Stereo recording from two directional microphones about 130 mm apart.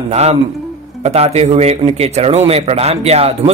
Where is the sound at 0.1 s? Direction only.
55° right (ahead or behind).